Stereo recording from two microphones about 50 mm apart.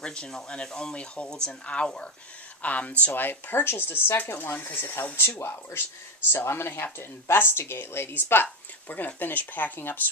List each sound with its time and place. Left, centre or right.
0.0 s speech: centre
3.1 s speech: left